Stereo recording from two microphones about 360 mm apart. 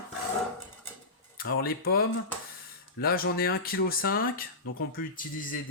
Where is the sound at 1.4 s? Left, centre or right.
Left.